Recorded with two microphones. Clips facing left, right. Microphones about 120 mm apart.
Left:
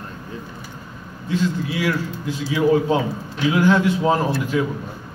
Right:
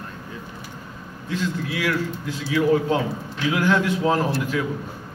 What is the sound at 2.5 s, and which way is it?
A man's voice, 20° left (ahead or behind).